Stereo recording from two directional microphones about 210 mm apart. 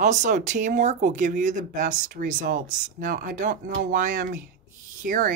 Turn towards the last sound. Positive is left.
turn(degrees=-40)  # may be behind; listen again after turning